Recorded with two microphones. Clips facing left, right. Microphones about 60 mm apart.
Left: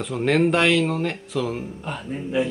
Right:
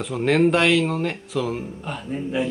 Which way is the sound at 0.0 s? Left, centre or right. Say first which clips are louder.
Right 1 dB; centre.